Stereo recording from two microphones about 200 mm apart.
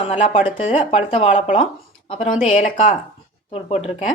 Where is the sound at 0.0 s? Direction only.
30° left (ahead or behind).